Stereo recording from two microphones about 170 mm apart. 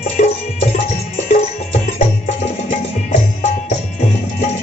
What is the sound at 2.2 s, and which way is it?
Music, 45° left (ahead or behind).